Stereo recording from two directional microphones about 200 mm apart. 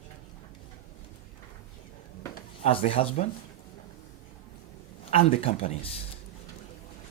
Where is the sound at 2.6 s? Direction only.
30° left (ahead or behind).